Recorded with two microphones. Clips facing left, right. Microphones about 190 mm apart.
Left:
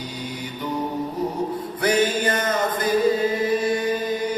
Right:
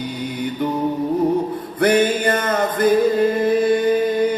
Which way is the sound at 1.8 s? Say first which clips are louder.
Right 5 dB; 55° right (ahead or behind).